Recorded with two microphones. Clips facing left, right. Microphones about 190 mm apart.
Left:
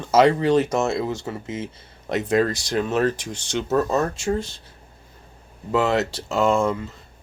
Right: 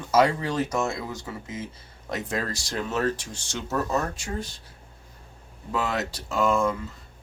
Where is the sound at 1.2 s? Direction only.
75° left (ahead or behind).